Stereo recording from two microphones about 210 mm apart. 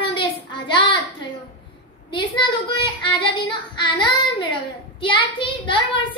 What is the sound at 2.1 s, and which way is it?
Child singing, 20° left (ahead or behind).